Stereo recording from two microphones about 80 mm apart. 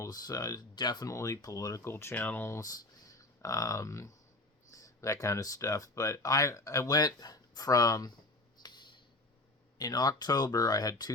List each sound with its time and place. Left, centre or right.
0.1 s speech: left
0.8 s speech: left
1.0 s speech: left
1.8 s speech: left
2.1 s speech: left
3.1 s speech: left
8.6 s a sound: left
9.7 s speech: left